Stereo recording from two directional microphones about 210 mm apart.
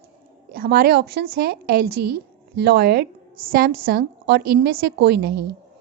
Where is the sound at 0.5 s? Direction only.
45° right (ahead or behind).